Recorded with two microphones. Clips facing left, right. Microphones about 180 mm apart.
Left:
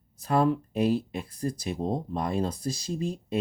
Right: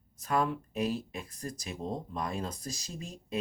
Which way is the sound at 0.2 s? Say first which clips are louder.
Left 6 dB; 30° left (ahead or behind).